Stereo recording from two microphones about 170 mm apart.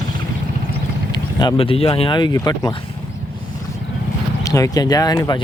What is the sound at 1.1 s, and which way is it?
Speech, 25° left (ahead or behind).